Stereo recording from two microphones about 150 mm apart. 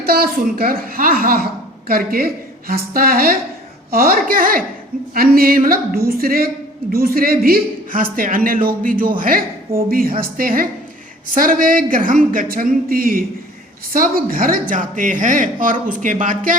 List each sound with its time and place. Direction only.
0.0 s a woman's voice: 90° right; by 4.6 s 70° right (ahead or behind)
5.1 s a woman's voice: 80° right
6.1 s a woman's voice: 90° right
8.1 s speech: 70° right (ahead or behind)
14.7 s speech: 60° right (ahead or behind)